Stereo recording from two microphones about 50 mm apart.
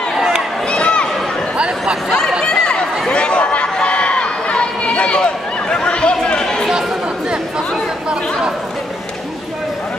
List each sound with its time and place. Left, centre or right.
0.1 s run: centre
0.7 s a sound: left
2.4 s chatter: left
3.8 s run: left